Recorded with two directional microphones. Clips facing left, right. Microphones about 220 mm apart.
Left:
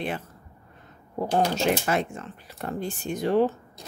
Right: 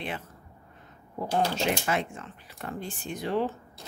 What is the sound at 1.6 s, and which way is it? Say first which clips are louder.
Speech: left 4 dB; 40° left (ahead or behind).